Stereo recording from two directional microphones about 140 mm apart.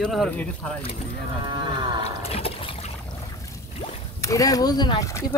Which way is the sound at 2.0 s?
45° left (ahead or behind).